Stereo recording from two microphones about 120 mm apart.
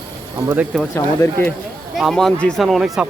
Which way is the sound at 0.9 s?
25° left (ahead or behind).